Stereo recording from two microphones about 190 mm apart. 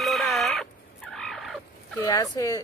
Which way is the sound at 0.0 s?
Centre (ahead or behind).